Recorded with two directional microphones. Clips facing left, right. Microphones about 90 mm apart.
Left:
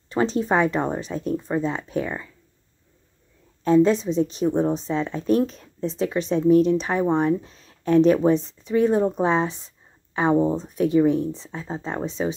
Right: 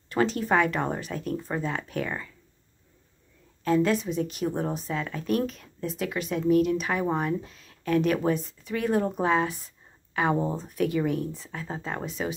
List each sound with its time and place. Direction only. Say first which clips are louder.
0.1 s a woman's voice: left 3 dB; 20° left (ahead or behind)
3.6 s a woman's voice: left 6 dB; 25° left (ahead or behind)